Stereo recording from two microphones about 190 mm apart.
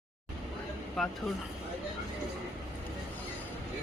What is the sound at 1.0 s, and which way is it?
Vehicle, centre (ahead or behind).